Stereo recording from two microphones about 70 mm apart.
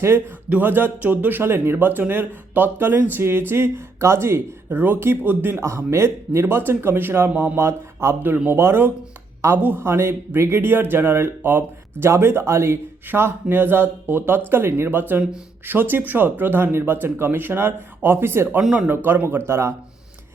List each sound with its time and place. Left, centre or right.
0.0 s a man's voice: right